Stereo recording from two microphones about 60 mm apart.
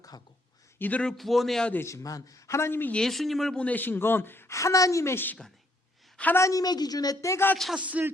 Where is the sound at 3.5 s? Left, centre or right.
Left.